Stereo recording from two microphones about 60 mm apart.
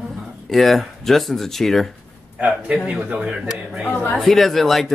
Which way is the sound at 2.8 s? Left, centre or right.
Right.